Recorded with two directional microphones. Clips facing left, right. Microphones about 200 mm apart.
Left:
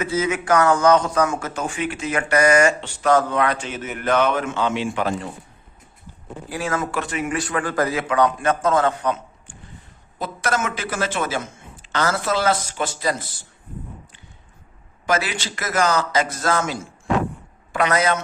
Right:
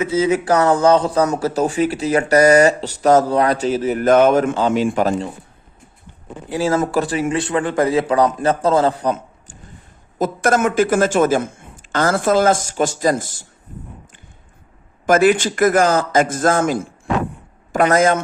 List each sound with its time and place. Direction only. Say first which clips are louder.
0.0 s a man's voice: right 6 dB; 30° right (ahead or behind)
6.5 s a man's voice: right 7 dB; 30° right (ahead or behind)
10.2 s a man's voice: right 7 dB; 45° right (ahead or behind)
15.0 s a man's voice: right 10 dB; 50° right (ahead or behind)